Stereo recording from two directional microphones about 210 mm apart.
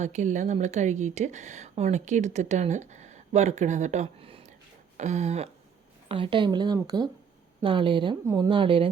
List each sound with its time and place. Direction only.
0.0 s a woman's voice: 35° right (ahead or behind)